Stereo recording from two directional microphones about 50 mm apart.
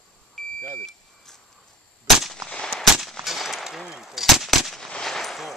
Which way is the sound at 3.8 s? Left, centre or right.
Centre.